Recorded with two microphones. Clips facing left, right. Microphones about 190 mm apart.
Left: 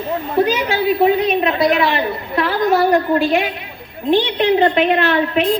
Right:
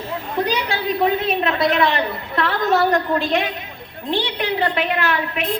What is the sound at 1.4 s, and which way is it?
Speech, 5° left (ahead or behind).